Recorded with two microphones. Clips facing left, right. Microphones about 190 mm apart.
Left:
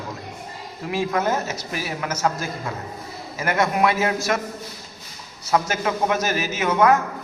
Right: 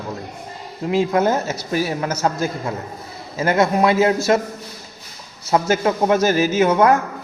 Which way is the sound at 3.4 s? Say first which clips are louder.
Right 4 dB; 25° right (ahead or behind).